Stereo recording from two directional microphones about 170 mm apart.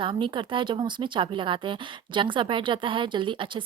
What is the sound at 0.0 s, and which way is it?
Speech, 30° right (ahead or behind).